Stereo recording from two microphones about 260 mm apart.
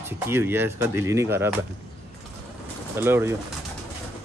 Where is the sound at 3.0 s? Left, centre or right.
Centre.